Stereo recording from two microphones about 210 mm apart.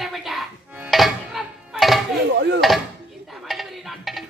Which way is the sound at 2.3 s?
55° right (ahead or behind).